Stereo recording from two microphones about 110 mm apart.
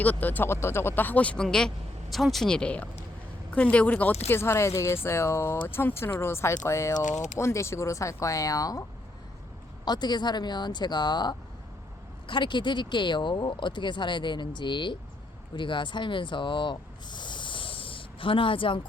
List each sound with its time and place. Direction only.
0.0 s speech: 15° left (ahead or behind); by 8.8 s 30° left (ahead or behind)
9.8 s speech: 40° left (ahead or behind)